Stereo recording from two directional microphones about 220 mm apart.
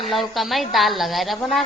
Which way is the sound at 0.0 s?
Centre (ahead or behind).